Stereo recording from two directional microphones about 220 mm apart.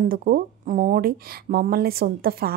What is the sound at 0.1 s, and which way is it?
A woman's voice, 40° right (ahead or behind).